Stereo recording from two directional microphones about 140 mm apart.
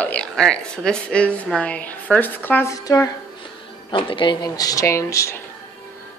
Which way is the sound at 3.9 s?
35° left (ahead or behind).